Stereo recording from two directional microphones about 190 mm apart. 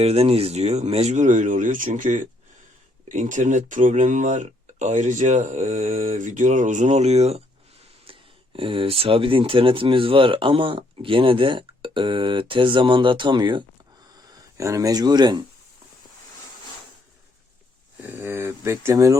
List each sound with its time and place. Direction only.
0.0 s speech: 30° right (ahead or behind)
18.0 s speech: 10° right (ahead or behind)